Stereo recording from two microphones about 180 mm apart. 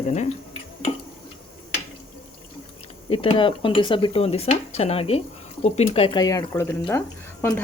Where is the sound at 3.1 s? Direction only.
30° left (ahead or behind).